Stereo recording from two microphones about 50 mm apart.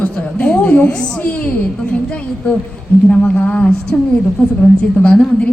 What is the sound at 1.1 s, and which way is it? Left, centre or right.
Speech, left.